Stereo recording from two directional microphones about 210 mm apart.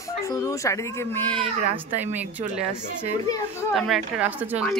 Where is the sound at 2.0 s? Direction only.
10° right (ahead or behind).